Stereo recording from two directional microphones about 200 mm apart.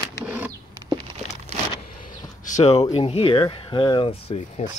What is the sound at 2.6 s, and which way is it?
Speech, 30° left (ahead or behind).